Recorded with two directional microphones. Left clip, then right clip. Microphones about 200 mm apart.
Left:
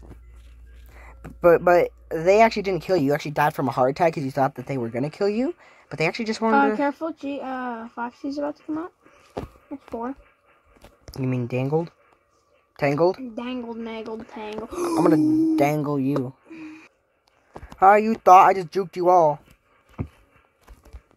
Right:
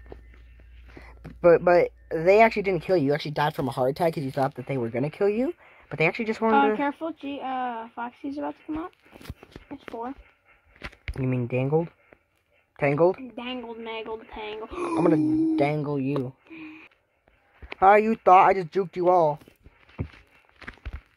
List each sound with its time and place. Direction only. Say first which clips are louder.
1.0 s speech: left 1 dB; centre (ahead or behind)
6.9 s speech: left 3 dB; 35° left (ahead or behind)
11.1 s speech: left 1 dB; 5° left (ahead or behind)
13.3 s speech: left 3 dB; 40° left (ahead or behind)
15.0 s speech: left 3 dB; 5° left (ahead or behind)
16.5 s a sound: left 2 dB; 40° left (ahead or behind)
17.7 s speech: left 2 dB; 5° left (ahead or behind)
20.0 s walk: left 2 dB; 5° left (ahead or behind)